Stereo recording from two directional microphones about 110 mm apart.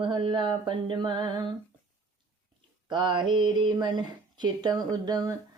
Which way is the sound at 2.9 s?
45° right (ahead or behind).